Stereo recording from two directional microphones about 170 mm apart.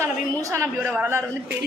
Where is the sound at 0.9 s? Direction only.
10° right (ahead or behind).